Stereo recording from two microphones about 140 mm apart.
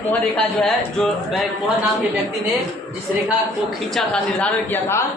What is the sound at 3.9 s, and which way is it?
Speech, centre (ahead or behind).